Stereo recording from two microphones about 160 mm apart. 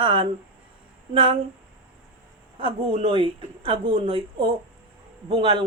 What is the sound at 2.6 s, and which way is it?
Speech, 35° right (ahead or behind).